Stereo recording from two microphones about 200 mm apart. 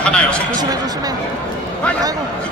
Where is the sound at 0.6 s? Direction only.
20° right (ahead or behind).